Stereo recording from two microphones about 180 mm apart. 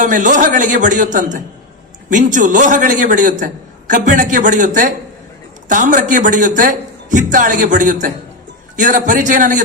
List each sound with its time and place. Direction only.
0.0 s a man's voice: 45° right (ahead or behind)